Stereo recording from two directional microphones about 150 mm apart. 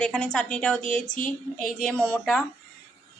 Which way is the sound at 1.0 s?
60° left (ahead or behind).